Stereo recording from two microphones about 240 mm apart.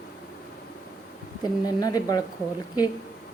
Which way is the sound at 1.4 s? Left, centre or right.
Centre.